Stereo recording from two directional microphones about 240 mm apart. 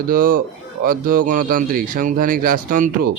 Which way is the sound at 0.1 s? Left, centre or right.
Right.